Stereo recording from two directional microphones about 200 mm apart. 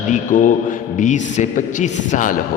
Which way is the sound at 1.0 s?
35° left (ahead or behind).